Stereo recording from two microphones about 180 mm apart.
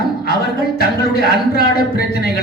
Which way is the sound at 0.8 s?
60° left (ahead or behind).